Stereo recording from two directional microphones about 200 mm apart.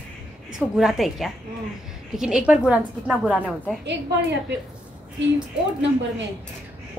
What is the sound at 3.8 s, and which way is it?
Speech, 60° right (ahead or behind).